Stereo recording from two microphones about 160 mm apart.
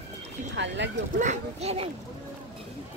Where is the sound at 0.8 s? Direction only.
90° right.